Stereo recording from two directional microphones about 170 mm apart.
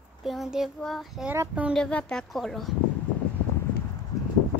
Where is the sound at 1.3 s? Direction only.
10° right (ahead or behind).